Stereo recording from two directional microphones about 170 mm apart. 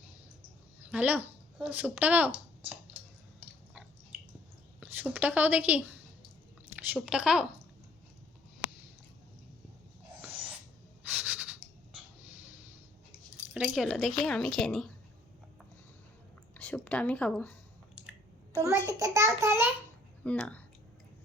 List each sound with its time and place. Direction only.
0.8 s speech: 10° right (ahead or behind)
4.8 s a woman's voice: 10° right (ahead or behind)
10.1 s snort: 10° right (ahead or behind)
11.1 s a sound: 10° right (ahead or behind)
13.5 s a woman's voice: 5° right (ahead or behind)
16.6 s speech: 5° left (ahead or behind)
18.9 s a child's voice: 20° right (ahead or behind)
20.2 s speech: 5° left (ahead or behind)